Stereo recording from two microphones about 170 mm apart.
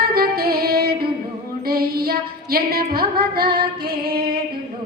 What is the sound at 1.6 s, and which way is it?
Female singing, 60° right (ahead or behind).